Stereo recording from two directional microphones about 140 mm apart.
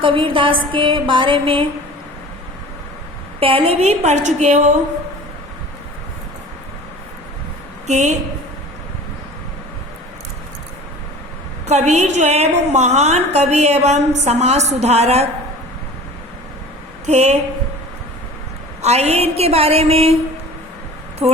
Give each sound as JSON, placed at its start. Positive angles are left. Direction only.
{"t": 0.0, "sound": "music", "side_deg": -40}
{"t": 3.4, "sound": "a woman's voice", "side_deg": -40}
{"t": 7.9, "sound": "a woman's voice", "side_deg": -55}
{"t": 11.6, "sound": "a woman's voice", "side_deg": -55}
{"t": 17.1, "sound": "a woman's voice", "side_deg": -50}
{"t": 18.8, "sound": "a woman's voice", "side_deg": -50}
{"t": 21.2, "sound": "speech", "side_deg": -5}